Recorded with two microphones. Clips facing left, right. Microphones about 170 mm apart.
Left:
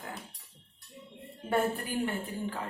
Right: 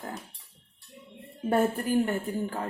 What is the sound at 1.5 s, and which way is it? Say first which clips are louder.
A woman's voice: right 5 dB; 45° right (ahead or behind).